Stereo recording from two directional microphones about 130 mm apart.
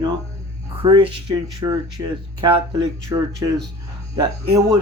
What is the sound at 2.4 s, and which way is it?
Speech, 40° right (ahead or behind).